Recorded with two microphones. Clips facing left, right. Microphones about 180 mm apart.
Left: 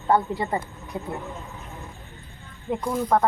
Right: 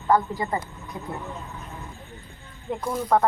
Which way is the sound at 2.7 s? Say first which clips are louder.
Even; centre (ahead or behind).